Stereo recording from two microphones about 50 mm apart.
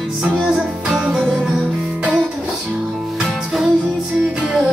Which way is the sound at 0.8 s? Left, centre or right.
Right.